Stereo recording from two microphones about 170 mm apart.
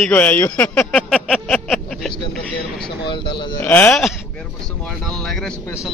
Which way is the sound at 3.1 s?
30° left (ahead or behind).